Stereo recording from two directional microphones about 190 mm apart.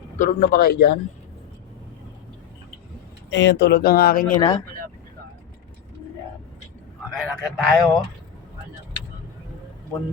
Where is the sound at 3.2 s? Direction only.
65° left (ahead or behind); by 4.3 s 50° left (ahead or behind).